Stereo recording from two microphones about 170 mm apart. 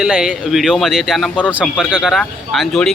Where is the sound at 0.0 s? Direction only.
5° right (ahead or behind).